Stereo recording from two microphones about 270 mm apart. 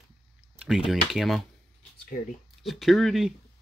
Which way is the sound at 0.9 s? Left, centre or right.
Centre.